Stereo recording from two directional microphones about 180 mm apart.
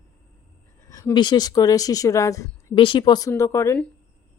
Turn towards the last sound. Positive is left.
turn(degrees=15)  # may be behind; listen again after turning